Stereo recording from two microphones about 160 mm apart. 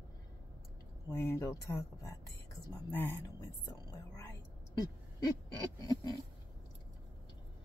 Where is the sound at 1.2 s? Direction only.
20° left (ahead or behind).